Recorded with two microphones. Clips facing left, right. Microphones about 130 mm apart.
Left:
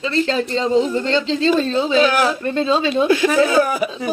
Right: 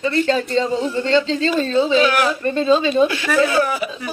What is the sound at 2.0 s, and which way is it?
Speech, 40° left (ahead or behind).